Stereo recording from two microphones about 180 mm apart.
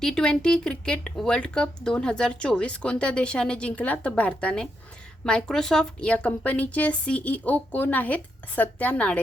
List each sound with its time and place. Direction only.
0.0 s speech: 5° left (ahead or behind)